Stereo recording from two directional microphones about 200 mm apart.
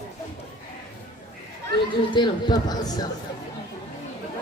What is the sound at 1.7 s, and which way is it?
Speech, 25° left (ahead or behind).